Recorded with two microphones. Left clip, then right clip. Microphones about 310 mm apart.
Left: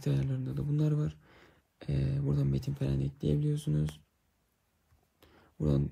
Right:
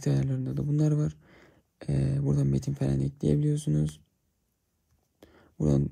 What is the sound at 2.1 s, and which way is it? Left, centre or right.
Speech, centre.